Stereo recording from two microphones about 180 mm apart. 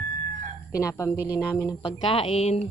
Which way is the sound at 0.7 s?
15° left (ahead or behind).